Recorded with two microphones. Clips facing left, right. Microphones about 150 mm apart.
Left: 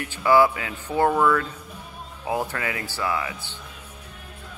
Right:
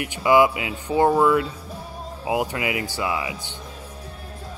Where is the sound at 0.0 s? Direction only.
15° right (ahead or behind).